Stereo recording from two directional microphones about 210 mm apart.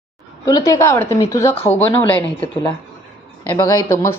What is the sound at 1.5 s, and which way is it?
Speech, 30° left (ahead or behind).